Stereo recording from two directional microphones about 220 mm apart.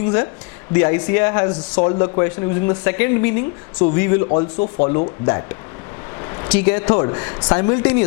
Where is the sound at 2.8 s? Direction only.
15° left (ahead or behind).